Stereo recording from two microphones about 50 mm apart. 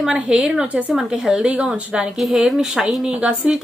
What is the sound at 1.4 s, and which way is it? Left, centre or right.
Speech, right.